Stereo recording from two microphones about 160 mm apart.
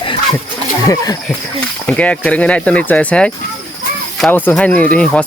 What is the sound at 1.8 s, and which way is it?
Speech, 10° left (ahead or behind).